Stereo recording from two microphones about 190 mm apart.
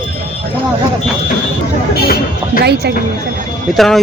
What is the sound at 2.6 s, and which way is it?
Speech, 60° right (ahead or behind).